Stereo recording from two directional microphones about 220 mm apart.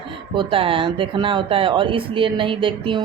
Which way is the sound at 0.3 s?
25° right (ahead or behind).